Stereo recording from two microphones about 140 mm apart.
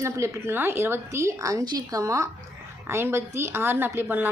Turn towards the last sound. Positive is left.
turn(degrees=-15)  # may be behind; listen again after turning